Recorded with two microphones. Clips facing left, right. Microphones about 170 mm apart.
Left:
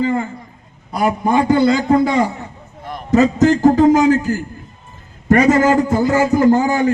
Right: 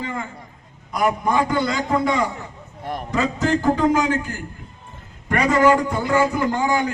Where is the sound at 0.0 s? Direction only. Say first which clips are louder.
Left 11 dB; 35° left (ahead or behind).